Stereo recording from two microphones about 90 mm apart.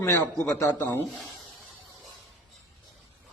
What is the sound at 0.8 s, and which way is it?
Speech, 20° left (ahead or behind).